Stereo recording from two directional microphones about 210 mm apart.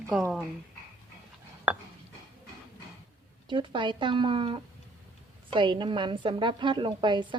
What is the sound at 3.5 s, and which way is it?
A woman's voice, 25° right (ahead or behind).